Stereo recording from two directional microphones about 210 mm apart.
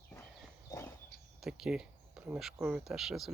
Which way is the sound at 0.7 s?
15° left (ahead or behind).